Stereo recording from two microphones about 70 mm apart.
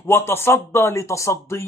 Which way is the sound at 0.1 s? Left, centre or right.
Left.